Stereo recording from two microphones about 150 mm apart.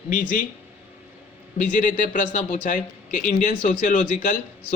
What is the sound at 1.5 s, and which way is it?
Speech, 60° left (ahead or behind).